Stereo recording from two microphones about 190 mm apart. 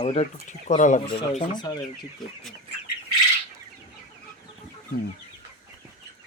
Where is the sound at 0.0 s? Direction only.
35° left (ahead or behind).